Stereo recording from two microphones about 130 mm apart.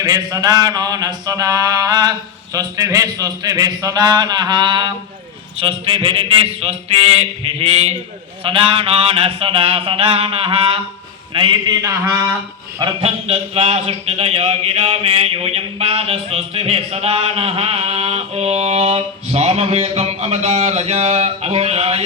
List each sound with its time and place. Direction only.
0.0 s a sound: 25° right (ahead or behind)
5.5 s a man's voice: 45° right (ahead or behind); by 12.2 s 20° right (ahead or behind)
13.0 s speech: 50° right (ahead or behind)